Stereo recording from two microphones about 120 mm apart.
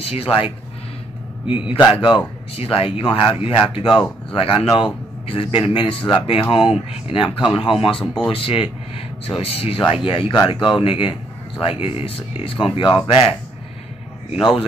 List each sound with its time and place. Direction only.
0.0 s speech: 55° left (ahead or behind)
1.4 s a man's voice: 10° right (ahead or behind)
1.8 s speech: 40° left (ahead or behind)